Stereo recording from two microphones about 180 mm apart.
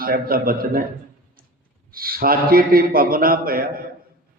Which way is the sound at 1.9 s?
55° right (ahead or behind).